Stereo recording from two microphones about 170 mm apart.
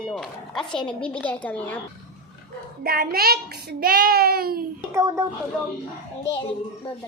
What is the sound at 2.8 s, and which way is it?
A child's voice, 65° right (ahead or behind).